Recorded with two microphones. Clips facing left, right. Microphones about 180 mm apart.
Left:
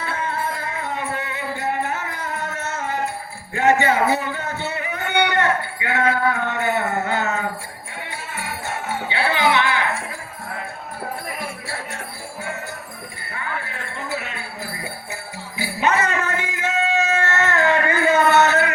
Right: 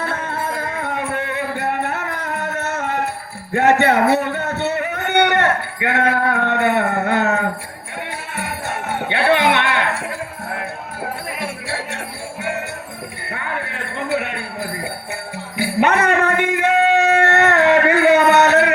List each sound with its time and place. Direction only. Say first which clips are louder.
0.0 s music: right 2 dB; 50° right (ahead or behind)
3.5 s speech: right 3 dB; 65° right (ahead or behind)
8.4 s jingle bell: right 3 dB; 60° right (ahead or behind)
11.3 s music: right 4 dB; 70° right (ahead or behind)
12.4 s jingle bell: right 6 dB; 70° right (ahead or behind)
13.3 s a sound: right 3 dB; 60° right (ahead or behind)